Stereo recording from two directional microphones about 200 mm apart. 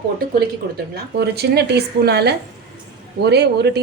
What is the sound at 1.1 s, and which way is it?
A woman's voice, 55° right (ahead or behind).